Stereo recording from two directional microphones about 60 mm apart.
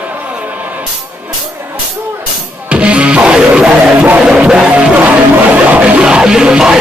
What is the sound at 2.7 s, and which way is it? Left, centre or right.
Music, centre.